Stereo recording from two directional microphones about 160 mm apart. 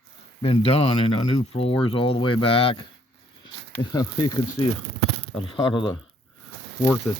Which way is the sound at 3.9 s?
25° left (ahead or behind).